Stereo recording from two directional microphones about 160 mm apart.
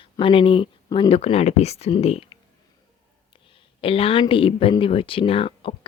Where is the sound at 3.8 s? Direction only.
35° left (ahead or behind).